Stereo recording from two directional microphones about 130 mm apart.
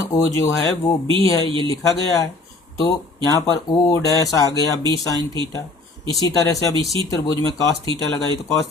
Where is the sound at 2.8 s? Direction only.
30° left (ahead or behind).